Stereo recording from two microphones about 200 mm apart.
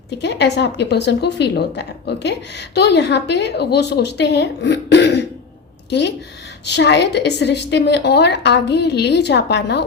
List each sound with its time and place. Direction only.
0.2 s a woman's voice: 60° left (ahead or behind)